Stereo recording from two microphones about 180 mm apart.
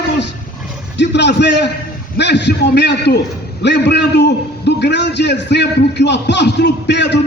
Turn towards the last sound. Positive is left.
turn(degrees=70)  # may be behind; listen again after turning